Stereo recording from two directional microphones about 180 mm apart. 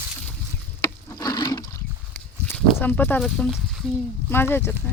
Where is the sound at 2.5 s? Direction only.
10° left (ahead or behind).